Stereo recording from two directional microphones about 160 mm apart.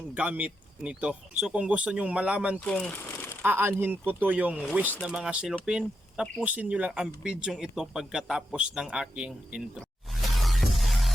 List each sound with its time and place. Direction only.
0.1 s speech: 10° right (ahead or behind)
2.6 s speech: 5° left (ahead or behind)
3.1 s a sound: 15° left (ahead or behind)
3.4 s speech: 15° right (ahead or behind)
10.2 s music: centre (ahead or behind)